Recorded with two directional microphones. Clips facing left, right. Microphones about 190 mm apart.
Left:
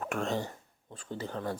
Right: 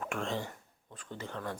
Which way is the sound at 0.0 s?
40° left (ahead or behind).